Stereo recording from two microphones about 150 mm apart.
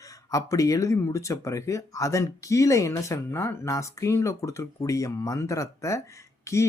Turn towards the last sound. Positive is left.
turn(degrees=20)  # may be behind; listen again after turning